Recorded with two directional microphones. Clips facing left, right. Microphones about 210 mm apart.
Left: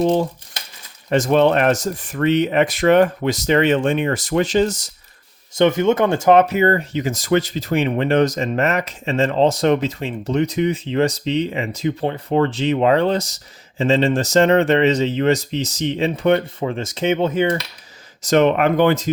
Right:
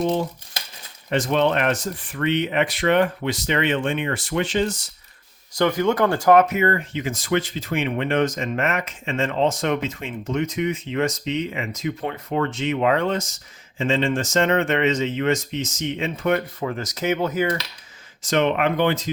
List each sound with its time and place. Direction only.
0.0 s speech: 35° left (ahead or behind)
5.5 s speech: 25° left (ahead or behind)
6.4 s speech: 35° left (ahead or behind)
18.2 s speech: 40° left (ahead or behind)